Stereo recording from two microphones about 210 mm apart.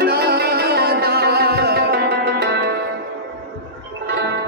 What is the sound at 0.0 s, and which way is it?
Music, 50° right (ahead or behind).